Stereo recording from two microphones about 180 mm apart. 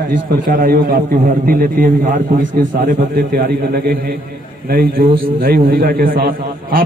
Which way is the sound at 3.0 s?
55° right (ahead or behind).